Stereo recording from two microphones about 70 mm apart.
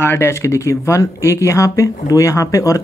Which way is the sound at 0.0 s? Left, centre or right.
Left.